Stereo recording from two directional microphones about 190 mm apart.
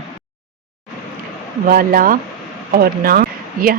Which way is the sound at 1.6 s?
50° right (ahead or behind).